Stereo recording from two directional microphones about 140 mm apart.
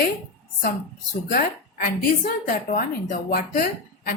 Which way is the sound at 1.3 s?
85° left.